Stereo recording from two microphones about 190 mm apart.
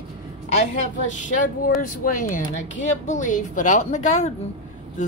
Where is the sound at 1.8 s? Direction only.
45° left (ahead or behind).